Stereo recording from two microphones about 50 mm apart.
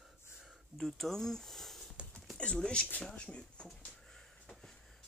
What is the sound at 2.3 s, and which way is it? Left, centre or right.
Speech, centre.